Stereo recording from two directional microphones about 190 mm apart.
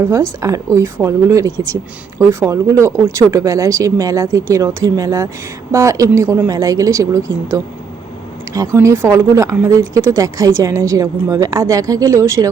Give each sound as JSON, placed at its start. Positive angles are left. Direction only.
{"t": 0.0, "sound": "a woman's voice", "side_deg": -15}